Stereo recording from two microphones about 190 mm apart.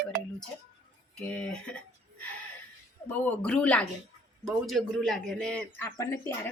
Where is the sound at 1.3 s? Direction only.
5° left (ahead or behind).